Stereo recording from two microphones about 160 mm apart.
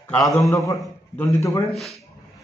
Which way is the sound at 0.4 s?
20° left (ahead or behind).